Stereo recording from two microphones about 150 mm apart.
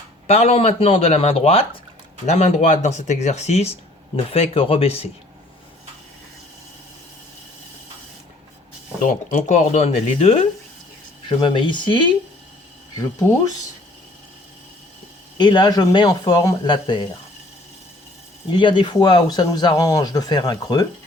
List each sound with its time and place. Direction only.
0.3 s speech: 45° left (ahead or behind)
9.0 s speech: 55° left (ahead or behind); by 12.0 s 35° left (ahead or behind)
13.0 s speech: 25° left (ahead or behind)
15.4 s speech: 30° left (ahead or behind)
18.5 s speech: 30° left (ahead or behind)